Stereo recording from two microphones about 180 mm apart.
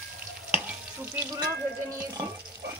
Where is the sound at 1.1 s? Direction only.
20° right (ahead or behind).